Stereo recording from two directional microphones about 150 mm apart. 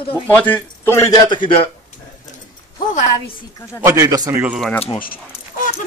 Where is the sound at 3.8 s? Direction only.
20° right (ahead or behind).